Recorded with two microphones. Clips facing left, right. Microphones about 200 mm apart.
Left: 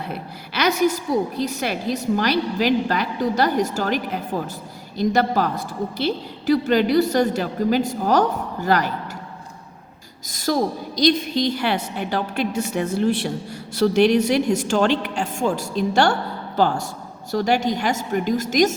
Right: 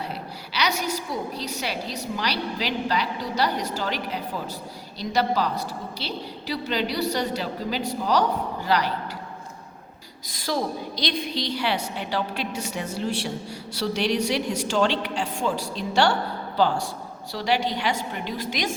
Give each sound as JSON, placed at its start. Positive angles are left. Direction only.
{"t": 0.1, "sound": "a woman's voice", "side_deg": 50}
{"t": 10.2, "sound": "a woman's voice", "side_deg": 45}